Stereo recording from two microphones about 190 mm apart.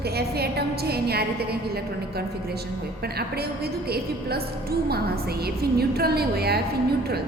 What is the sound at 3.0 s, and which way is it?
A woman's voice, 55° right (ahead or behind).